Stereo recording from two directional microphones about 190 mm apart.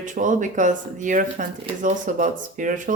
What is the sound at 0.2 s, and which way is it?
Speech, 40° right (ahead or behind).